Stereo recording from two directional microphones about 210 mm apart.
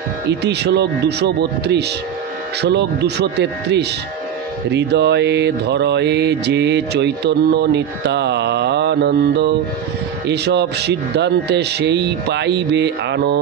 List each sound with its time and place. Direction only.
0.3 s speech: 55° right (ahead or behind)
4.6 s mantra: 55° right (ahead or behind)
10.2 s speech: 55° right (ahead or behind)